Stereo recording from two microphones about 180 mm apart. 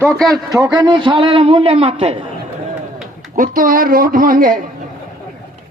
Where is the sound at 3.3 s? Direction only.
50° right (ahead or behind).